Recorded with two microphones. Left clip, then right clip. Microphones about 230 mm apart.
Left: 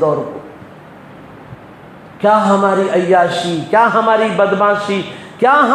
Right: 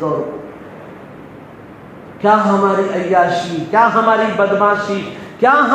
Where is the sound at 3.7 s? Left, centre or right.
Left.